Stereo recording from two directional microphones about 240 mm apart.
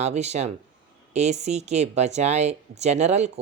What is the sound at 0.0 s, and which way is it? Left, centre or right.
Speech, right.